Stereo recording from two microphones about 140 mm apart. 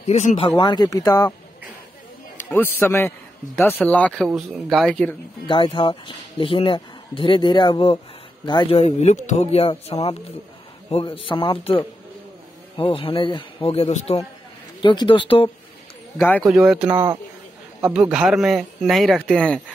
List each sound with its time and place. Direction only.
0.0 s speech: 55° left (ahead or behind)
0.6 s speech: 30° left (ahead or behind)
2.3 s a man's voice: 15° left (ahead or behind)
5.5 s speech: 35° left (ahead or behind)
14.8 s speech: 35° left (ahead or behind)
16.2 s speech: 10° left (ahead or behind)
16.4 s speech: 5° right (ahead or behind)
16.9 s speech: 30° right (ahead or behind)
17.9 s speech: 5° right (ahead or behind)